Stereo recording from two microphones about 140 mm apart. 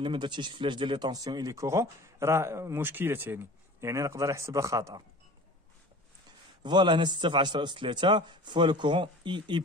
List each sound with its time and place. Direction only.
0.0 s speech: 35° right (ahead or behind)
6.6 s a man's voice: 35° right (ahead or behind)